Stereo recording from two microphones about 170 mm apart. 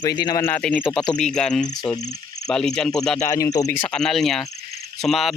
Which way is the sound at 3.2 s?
20° left (ahead or behind).